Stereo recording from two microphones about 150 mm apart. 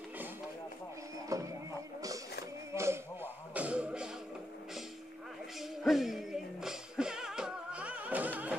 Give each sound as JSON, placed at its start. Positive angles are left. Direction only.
{"t": 1.3, "sound": "music", "side_deg": -20}
{"t": 2.7, "sound": "music", "side_deg": -20}
{"t": 5.6, "sound": "music", "side_deg": 0}